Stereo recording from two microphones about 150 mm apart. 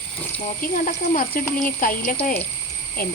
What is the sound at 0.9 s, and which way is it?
Speech, 65° left (ahead or behind).